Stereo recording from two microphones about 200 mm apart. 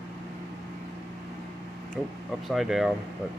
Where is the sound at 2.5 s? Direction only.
Centre (ahead or behind).